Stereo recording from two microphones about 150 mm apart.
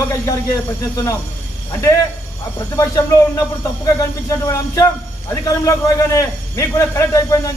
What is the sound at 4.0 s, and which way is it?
A man's voice, 20° left (ahead or behind).